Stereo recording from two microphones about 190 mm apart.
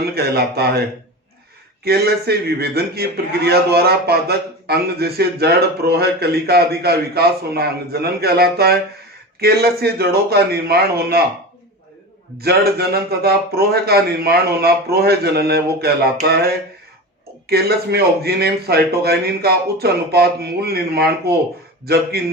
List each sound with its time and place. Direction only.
0.0 s a man's voice: 55° right (ahead or behind)
1.8 s a man's voice: 55° right (ahead or behind)
12.4 s a man's voice: 55° right (ahead or behind)
17.4 s a man's voice: 55° right (ahead or behind)